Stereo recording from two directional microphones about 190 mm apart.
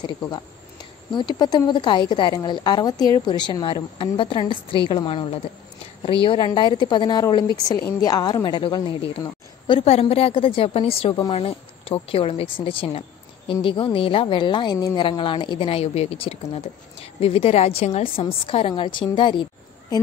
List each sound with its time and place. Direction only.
1.1 s a woman's voice: 20° left (ahead or behind)